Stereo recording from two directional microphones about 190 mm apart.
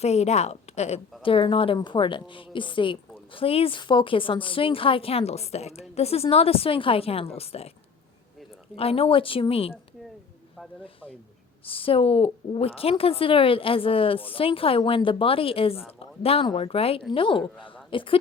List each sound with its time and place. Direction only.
0.0 s a woman's voice: 35° left (ahead or behind)
8.7 s a woman's voice: 30° left (ahead or behind)
11.6 s a woman's voice: 30° left (ahead or behind)